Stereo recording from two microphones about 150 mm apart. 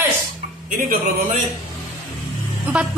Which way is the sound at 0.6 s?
60° right (ahead or behind).